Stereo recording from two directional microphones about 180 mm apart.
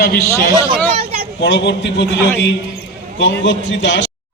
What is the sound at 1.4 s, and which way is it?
Speech, 75° left (ahead or behind).